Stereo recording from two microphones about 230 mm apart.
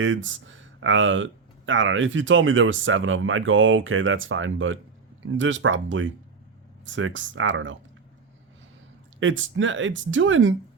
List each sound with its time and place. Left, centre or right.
0.0 s speech: right
9.2 s speech: right